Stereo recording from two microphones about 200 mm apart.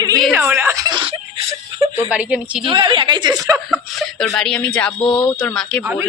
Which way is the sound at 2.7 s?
25° right (ahead or behind).